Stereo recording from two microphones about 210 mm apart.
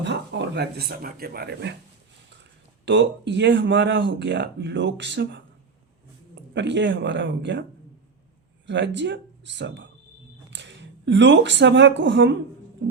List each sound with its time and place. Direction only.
0.0 s speech: 55° right (ahead or behind)
2.8 s speech: 55° right (ahead or behind)
6.5 s speech: 55° right (ahead or behind)
8.6 s speech: 60° right (ahead or behind)